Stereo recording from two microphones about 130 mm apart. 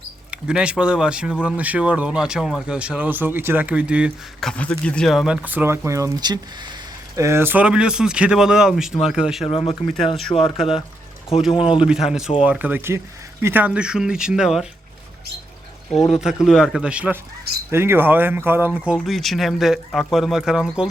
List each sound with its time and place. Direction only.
0.3 s speech: 10° right (ahead or behind)
4.4 s speech: 10° left (ahead or behind); by 6.7 s 35° right (ahead or behind)
7.2 s speech: 20° right (ahead or behind); by 9.4 s 5° right (ahead or behind)
9.4 s speech: 50° left (ahead or behind)
11.5 s speech: 45° left (ahead or behind)
11.9 s speech: 5° right (ahead or behind)
16.1 s speech: 5° right (ahead or behind)
18.9 s speech: centre (ahead or behind)